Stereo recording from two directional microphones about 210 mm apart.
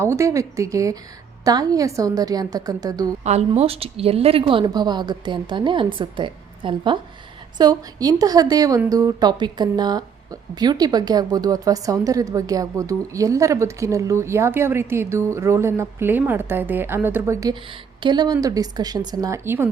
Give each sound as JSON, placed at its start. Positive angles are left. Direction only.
{"t": 0.0, "sound": "a woman's voice", "side_deg": -15}
{"t": 3.2, "sound": "a woman's voice", "side_deg": -30}